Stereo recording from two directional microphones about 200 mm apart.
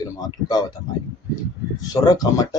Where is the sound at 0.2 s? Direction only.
20° left (ahead or behind).